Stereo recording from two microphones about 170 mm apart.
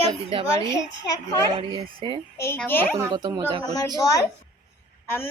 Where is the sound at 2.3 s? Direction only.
15° left (ahead or behind).